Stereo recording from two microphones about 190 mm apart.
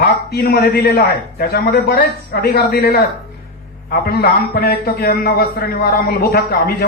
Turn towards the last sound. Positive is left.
turn(degrees=55)  # may be behind; listen again after turning